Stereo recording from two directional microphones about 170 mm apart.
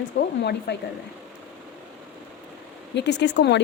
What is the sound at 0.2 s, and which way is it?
Speech, 75° left (ahead or behind).